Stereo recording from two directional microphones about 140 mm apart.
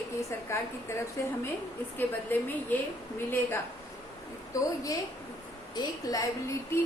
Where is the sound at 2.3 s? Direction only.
15° left (ahead or behind).